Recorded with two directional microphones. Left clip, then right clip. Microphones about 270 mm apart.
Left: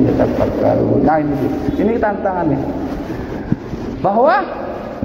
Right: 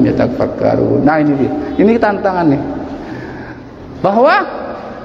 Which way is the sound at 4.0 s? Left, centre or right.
Right.